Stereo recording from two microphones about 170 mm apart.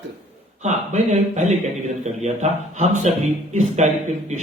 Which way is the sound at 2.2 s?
40° right (ahead or behind).